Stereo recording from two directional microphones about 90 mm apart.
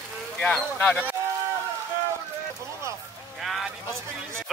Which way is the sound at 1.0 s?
25° right (ahead or behind).